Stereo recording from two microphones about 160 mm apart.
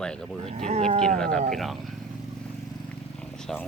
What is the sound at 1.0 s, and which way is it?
Speech, 5° left (ahead or behind).